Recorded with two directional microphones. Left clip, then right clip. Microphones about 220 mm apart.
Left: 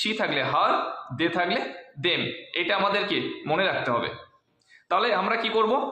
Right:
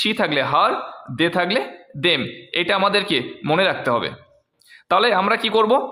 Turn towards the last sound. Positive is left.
turn(degrees=-50)  # may be behind; listen again after turning